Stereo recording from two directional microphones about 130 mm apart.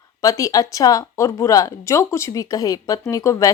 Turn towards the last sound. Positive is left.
turn(degrees=25)  # may be behind; listen again after turning